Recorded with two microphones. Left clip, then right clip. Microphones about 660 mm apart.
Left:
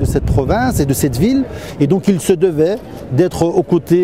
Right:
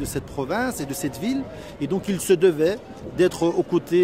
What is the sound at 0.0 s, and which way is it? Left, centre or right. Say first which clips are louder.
Speech: left 11 dB; left.